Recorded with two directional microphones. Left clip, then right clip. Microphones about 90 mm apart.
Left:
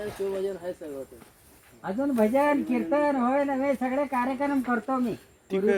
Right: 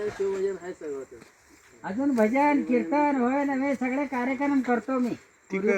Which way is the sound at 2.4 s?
90° right.